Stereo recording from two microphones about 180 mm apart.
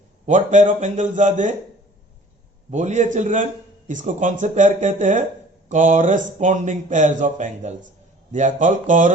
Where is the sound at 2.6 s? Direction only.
40° right (ahead or behind).